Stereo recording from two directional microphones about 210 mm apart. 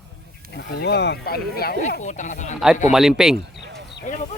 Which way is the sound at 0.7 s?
55° left (ahead or behind).